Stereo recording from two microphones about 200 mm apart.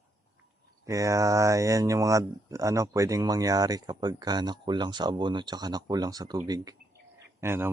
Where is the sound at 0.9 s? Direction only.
15° right (ahead or behind).